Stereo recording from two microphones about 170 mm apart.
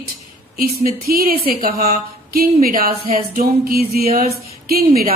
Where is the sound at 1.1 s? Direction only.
60° right (ahead or behind).